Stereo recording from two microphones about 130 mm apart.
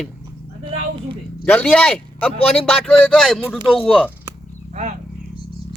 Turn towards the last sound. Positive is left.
turn(degrees=-65)  # may be behind; listen again after turning